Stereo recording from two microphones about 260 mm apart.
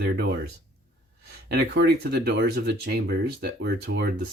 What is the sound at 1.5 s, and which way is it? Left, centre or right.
Speech, right.